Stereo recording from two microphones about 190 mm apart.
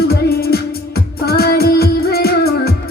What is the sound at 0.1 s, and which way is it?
Music, 55° left (ahead or behind).